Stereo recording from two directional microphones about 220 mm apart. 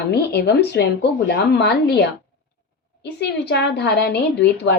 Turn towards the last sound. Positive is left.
turn(degrees=50)  # may be behind; listen again after turning